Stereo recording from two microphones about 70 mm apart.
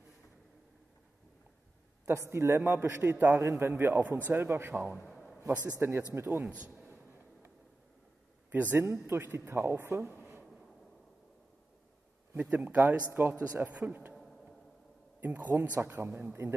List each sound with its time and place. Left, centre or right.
2.0 s speech: right
3.0 s speech: right
3.3 s speech: right
5.4 s speech: right
8.5 s a man's voice: right
9.0 s speech: right
12.4 s speech: right
14.1 s a sound: centre
15.1 s a man's voice: right